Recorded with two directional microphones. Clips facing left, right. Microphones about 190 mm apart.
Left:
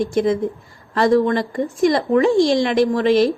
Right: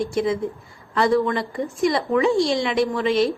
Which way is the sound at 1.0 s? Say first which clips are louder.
Left 4 dB; 45° left (ahead or behind).